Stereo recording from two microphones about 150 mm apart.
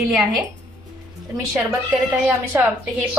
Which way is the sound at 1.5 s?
5° right (ahead or behind).